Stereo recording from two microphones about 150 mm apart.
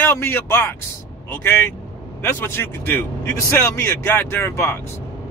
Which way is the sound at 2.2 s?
15° left (ahead or behind).